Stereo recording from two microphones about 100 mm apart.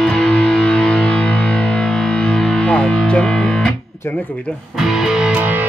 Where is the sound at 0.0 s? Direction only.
10° left (ahead or behind).